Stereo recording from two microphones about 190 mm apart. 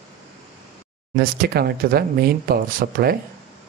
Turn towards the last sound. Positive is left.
turn(degrees=-50)  # may be behind; listen again after turning